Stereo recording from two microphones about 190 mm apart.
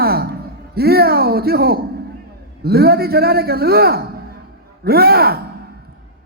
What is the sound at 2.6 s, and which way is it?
A man's voice, 55° right (ahead or behind).